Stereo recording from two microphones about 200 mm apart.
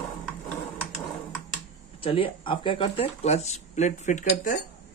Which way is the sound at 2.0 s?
25° left (ahead or behind).